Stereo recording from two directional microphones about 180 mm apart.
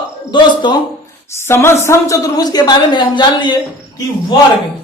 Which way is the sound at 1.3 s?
15° left (ahead or behind).